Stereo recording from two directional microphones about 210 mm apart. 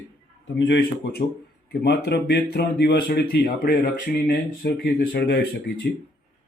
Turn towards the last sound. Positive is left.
turn(degrees=55)  # may be behind; listen again after turning